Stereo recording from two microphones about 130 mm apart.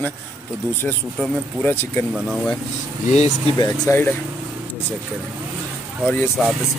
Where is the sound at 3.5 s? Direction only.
30° left (ahead or behind).